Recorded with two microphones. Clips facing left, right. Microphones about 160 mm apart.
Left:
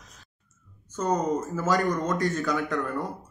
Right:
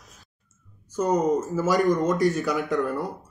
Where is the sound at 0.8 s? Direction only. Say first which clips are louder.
Right 4 dB; 15° right (ahead or behind).